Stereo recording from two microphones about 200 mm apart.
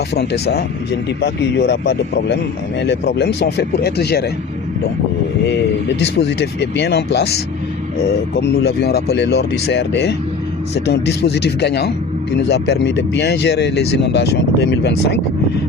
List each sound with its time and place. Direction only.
1.2 s speech: 55° left (ahead or behind)
6.0 s speech: 60° left (ahead or behind)